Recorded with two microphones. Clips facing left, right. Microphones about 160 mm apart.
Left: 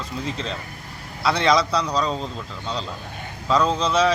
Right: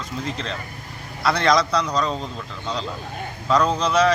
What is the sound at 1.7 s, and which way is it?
Speech, 30° left (ahead or behind).